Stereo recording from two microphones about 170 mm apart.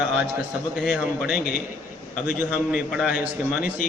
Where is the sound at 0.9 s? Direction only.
5° right (ahead or behind).